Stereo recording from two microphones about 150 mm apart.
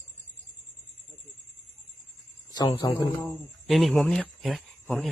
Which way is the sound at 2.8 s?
25° left (ahead or behind).